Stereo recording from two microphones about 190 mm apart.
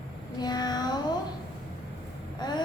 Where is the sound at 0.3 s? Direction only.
20° left (ahead or behind).